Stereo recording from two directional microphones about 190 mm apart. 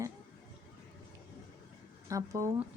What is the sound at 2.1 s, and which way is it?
Speech, 15° right (ahead or behind).